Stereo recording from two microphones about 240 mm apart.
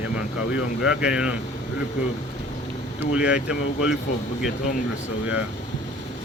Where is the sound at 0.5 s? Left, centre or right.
Centre.